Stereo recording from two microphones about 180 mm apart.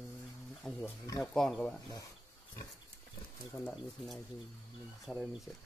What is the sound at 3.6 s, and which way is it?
Speech, centre (ahead or behind).